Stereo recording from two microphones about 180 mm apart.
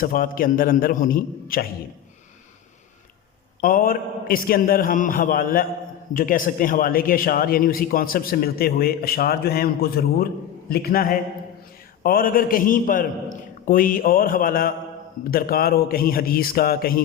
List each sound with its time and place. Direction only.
0.0 s a man's voice: 50° left (ahead or behind)
3.6 s a man's voice: 50° left (ahead or behind)